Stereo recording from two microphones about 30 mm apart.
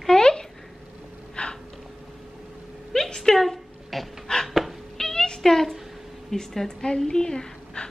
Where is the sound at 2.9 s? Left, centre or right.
Centre.